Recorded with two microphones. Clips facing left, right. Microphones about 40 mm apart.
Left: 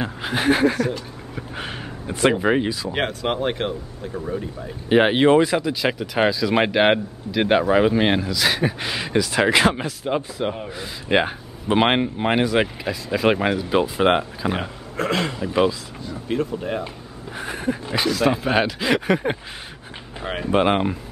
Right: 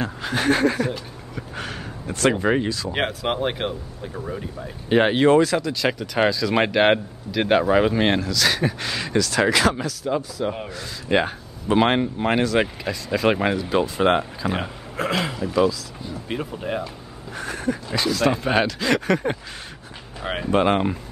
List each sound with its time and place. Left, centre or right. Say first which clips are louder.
0.0 s speech: left 1 dB; centre
0.7 s speech: left 1 dB; centre
1.3 s a sound: even; centre
2.3 s speech: left 1 dB; centre
2.9 s speech: left 1 dB; centre
4.8 s speech: left 1 dB; centre; by 10.5 s left
10.7 s speech: left 2 dB; centre
14.6 s speech: left 1 dB; centre
15.4 s a sound: even; left
16.1 s speech: left 5 dB; centre
17.4 s a sound: even; left
18.0 s speech: left 1 dB; centre
20.2 s speech: even; centre
20.5 s speech: left 1 dB; centre